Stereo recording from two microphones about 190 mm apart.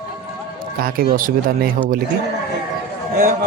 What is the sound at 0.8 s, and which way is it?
Speech, 50° right (ahead or behind).